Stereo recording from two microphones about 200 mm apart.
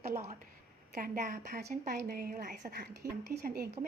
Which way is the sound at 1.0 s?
50° right (ahead or behind).